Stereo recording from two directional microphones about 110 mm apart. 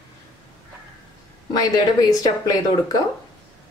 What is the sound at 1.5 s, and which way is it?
Speech, 35° left (ahead or behind).